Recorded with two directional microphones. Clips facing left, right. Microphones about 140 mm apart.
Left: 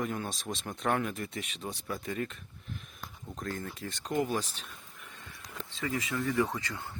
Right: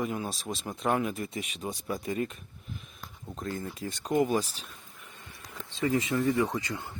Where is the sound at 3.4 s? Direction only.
10° right (ahead or behind).